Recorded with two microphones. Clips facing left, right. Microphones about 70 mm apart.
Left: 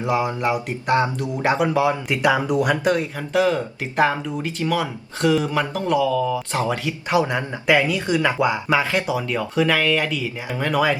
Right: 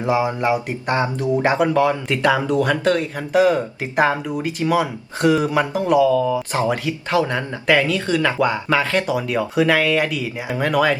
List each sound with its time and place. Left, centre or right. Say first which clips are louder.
0.0 s speech: right 2 dB; centre
1.5 s speech: right 2 dB; centre
3.2 s speech: right 3 dB; centre
7.1 s speech: even; centre
9.1 s speech: right 2 dB; centre